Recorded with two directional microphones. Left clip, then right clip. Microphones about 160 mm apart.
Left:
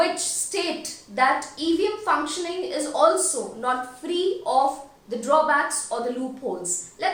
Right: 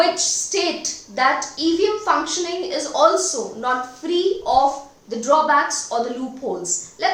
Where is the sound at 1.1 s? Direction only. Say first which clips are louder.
Right 2 dB; 20° right (ahead or behind).